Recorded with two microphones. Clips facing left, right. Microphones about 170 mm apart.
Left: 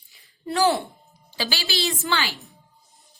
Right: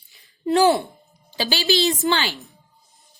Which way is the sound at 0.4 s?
20° right (ahead or behind).